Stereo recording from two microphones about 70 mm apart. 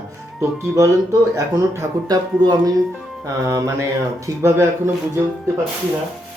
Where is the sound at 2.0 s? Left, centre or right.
Right.